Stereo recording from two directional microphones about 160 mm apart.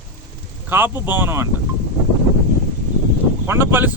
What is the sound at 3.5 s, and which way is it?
Speech, 15° right (ahead or behind).